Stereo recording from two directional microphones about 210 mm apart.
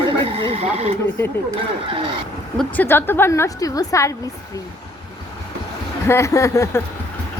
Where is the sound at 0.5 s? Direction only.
30° right (ahead or behind).